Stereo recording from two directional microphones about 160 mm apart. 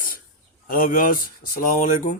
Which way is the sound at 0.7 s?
60° left (ahead or behind).